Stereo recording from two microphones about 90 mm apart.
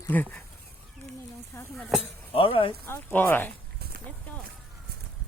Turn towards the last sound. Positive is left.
turn(degrees=20)  # may be behind; listen again after turning